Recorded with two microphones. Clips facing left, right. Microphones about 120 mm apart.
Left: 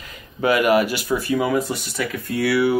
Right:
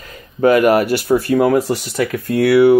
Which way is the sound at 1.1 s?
65° right (ahead or behind).